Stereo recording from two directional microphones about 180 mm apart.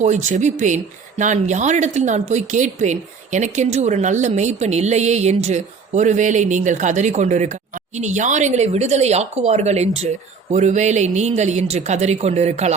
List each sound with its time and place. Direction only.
0.3 s a woman's voice: 40° right (ahead or behind)